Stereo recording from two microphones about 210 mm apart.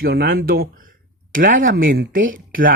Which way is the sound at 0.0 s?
45° right (ahead or behind).